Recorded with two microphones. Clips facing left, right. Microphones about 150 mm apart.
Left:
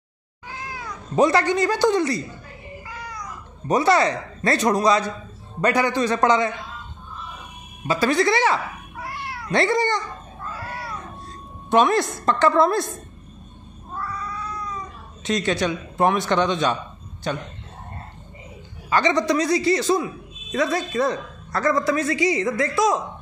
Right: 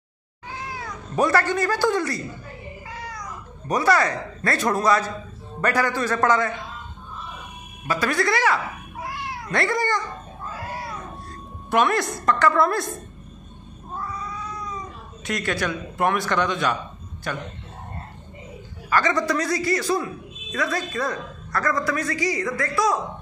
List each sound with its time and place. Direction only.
1.1 s a woman's voice: 20° left (ahead or behind)
3.6 s a woman's voice: 25° left (ahead or behind)
7.8 s a woman's voice: 25° left (ahead or behind)
8.9 s cat: 20° right (ahead or behind)
9.5 s a woman's voice: 25° left (ahead or behind)
11.7 s a woman's voice: 25° left (ahead or behind)
13.9 s cat: 20° right (ahead or behind)
15.2 s a woman's voice: 25° left (ahead or behind)
18.9 s a woman's voice: 20° left (ahead or behind)